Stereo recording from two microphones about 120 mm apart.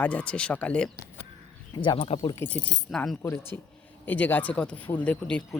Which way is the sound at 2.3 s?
20° left (ahead or behind).